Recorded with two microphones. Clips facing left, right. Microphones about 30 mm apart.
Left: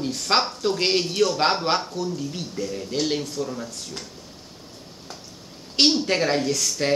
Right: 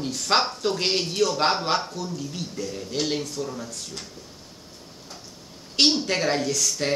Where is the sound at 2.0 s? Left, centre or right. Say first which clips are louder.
Left 3 dB; centre.